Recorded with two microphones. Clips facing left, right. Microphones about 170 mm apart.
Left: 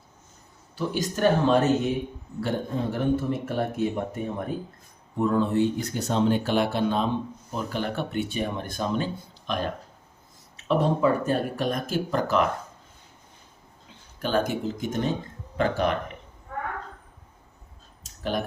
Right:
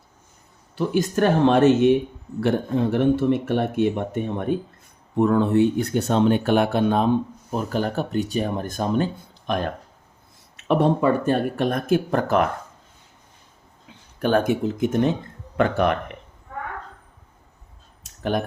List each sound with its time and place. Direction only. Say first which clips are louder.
0.8 s speech: right 4 dB; 55° right (ahead or behind); by 4.5 s 75° right (ahead or behind)
5.1 s speech: right 5 dB; 65° right (ahead or behind)
7.5 s speech: right 5 dB; 45° right (ahead or behind)
10.7 s speech: right 3 dB; 60° right (ahead or behind)
14.2 s speech: right 5 dB; 55° right (ahead or behind)
18.0 s clicking: right 4 dB; 55° right (ahead or behind)